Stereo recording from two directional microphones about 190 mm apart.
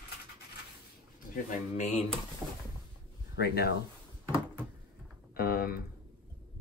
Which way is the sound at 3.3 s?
55° left (ahead or behind).